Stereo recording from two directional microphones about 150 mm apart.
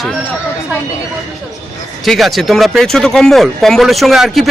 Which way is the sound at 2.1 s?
Centre (ahead or behind).